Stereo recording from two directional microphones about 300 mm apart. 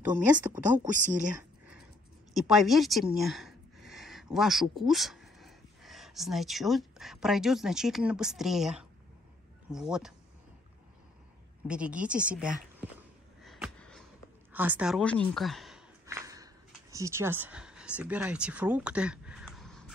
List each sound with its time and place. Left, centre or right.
0.1 s speech: centre
0.8 s speech: right
2.3 s speech: centre
11.6 s speech: centre
12.3 s a sound: centre
16.9 s speech: centre